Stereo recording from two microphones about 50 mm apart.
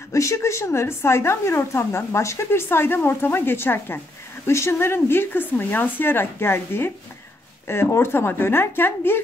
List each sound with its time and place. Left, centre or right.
0.1 s a woman's voice: left
2.7 s speech: left
4.5 s speech: left